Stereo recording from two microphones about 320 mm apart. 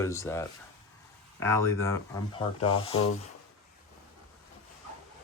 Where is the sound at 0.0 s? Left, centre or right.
Centre.